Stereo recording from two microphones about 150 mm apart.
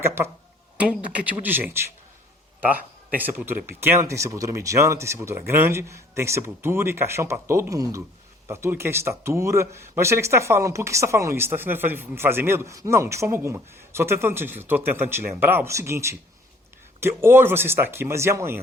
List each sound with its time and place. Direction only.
0.0 s speech: 15° right (ahead or behind)
3.2 s speech: 10° right (ahead or behind)